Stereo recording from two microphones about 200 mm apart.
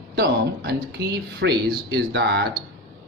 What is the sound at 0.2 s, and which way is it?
Speech, 50° right (ahead or behind).